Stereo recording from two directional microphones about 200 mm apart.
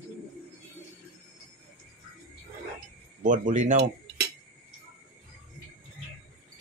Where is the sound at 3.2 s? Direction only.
40° right (ahead or behind).